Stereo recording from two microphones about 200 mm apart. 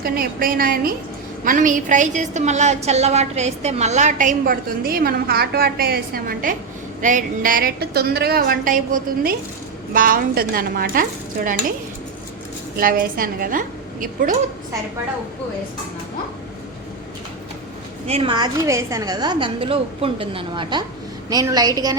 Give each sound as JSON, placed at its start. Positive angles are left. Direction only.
{"t": 0.0, "sound": "a woman's voice", "side_deg": -45}
{"t": 12.7, "sound": "a woman's voice", "side_deg": -45}
{"t": 18.1, "sound": "a woman's voice", "side_deg": -25}